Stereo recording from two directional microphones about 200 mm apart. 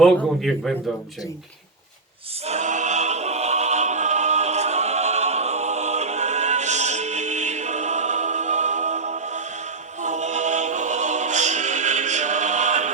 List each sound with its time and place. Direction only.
0.0 s a man's voice: centre (ahead or behind)
2.5 s choir: 35° right (ahead or behind)
10.0 s music: 35° right (ahead or behind)